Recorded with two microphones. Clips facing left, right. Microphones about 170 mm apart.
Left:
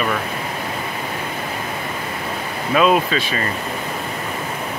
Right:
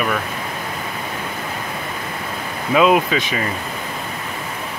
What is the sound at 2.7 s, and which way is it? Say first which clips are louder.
Speech: right 1 dB; 15° right (ahead or behind).